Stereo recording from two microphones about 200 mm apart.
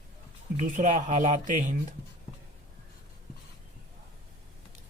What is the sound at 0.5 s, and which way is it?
Speech, 40° right (ahead or behind).